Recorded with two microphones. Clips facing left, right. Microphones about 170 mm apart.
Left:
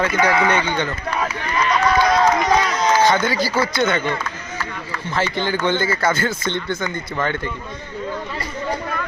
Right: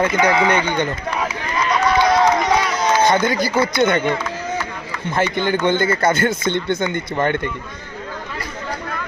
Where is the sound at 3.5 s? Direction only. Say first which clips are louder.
Right 3 dB; 15° right (ahead or behind).